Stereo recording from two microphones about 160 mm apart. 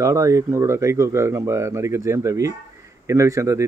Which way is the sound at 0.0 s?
20° right (ahead or behind).